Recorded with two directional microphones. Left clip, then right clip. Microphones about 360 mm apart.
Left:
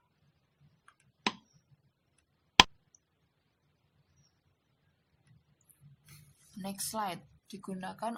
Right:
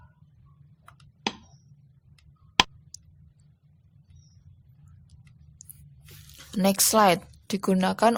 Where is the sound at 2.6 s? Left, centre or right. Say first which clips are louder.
Even; centre.